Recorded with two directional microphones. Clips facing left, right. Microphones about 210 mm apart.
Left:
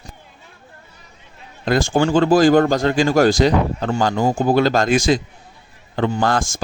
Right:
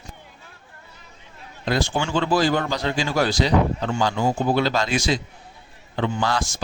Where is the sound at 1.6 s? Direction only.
45° left (ahead or behind).